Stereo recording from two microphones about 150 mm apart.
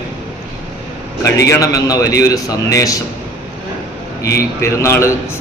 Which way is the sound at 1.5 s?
20° left (ahead or behind).